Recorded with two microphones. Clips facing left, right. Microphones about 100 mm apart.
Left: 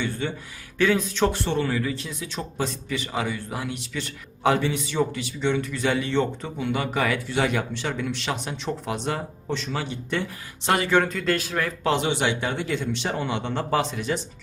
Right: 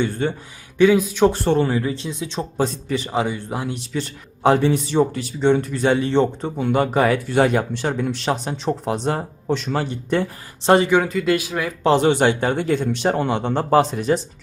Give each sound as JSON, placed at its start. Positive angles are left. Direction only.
{"t": 0.0, "sound": "speech", "side_deg": -35}
{"t": 0.8, "sound": "speech", "side_deg": -10}
{"t": 1.3, "sound": "speech", "side_deg": -35}
{"t": 10.8, "sound": "speech", "side_deg": -5}
{"t": 11.8, "sound": "speech", "side_deg": -35}